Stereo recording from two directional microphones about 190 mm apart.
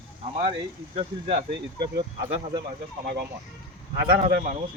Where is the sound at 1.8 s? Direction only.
25° right (ahead or behind).